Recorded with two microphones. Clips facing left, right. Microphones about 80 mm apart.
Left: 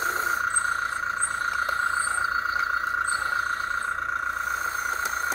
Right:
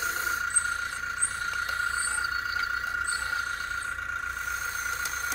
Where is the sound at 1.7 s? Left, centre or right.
Left.